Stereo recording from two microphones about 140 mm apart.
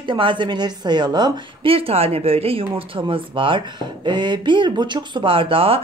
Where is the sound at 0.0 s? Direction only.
35° right (ahead or behind).